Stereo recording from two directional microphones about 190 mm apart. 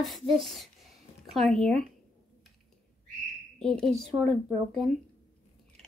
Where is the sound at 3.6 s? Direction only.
5° left (ahead or behind).